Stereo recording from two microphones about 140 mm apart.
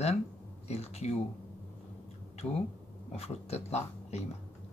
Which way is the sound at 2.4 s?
10° left (ahead or behind).